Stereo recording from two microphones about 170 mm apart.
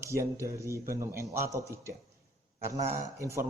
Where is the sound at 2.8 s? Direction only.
45° right (ahead or behind).